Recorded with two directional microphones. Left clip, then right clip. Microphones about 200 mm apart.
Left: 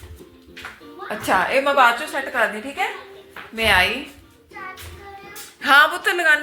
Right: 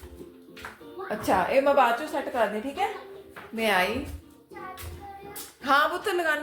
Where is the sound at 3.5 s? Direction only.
10° right (ahead or behind).